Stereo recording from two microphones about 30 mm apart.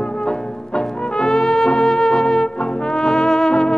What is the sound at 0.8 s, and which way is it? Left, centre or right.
Music, centre.